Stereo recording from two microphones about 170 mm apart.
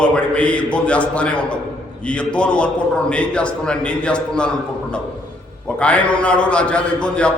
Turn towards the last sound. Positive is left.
turn(degrees=5)  # may be behind; listen again after turning